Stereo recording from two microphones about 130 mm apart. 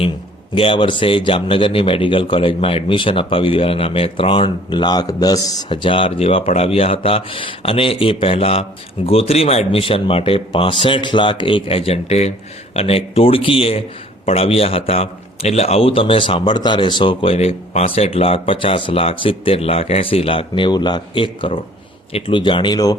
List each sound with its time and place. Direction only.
0.5 s a man's voice: 45° left (ahead or behind)
5.6 s a man's voice: 40° left (ahead or behind)